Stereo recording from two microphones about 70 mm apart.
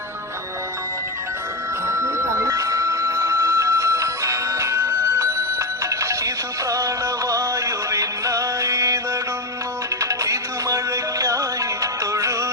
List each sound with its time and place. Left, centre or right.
1.9 s music: right
10.0 s music: right